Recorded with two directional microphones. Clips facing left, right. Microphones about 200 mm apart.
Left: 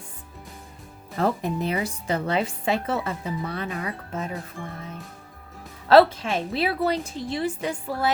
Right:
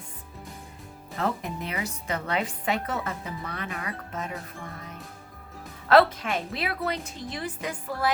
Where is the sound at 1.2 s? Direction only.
30° left (ahead or behind).